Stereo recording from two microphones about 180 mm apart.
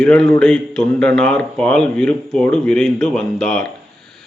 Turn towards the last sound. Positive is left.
turn(degrees=5)  # may be behind; listen again after turning